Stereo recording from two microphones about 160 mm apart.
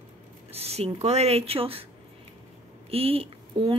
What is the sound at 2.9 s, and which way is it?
Speech, 35° right (ahead or behind).